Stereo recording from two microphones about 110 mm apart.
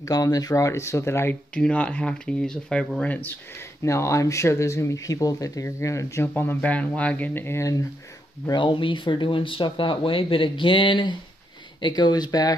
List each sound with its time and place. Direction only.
0.0 s speech: 35° left (ahead or behind)
1.5 s speech: 10° left (ahead or behind)
3.8 s speech: 25° left (ahead or behind)
8.5 s speech: 45° left (ahead or behind)